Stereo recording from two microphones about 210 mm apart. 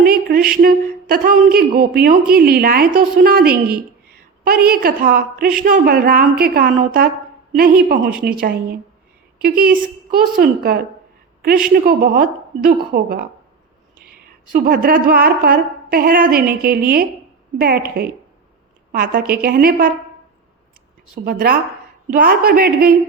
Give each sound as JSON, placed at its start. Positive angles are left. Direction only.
{"t": 0.0, "sound": "speech", "side_deg": -45}
{"t": 14.5, "sound": "speech", "side_deg": -45}
{"t": 21.2, "sound": "speech", "side_deg": -45}